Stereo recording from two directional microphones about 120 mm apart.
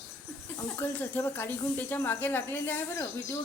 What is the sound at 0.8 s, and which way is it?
Speech, 15° left (ahead or behind).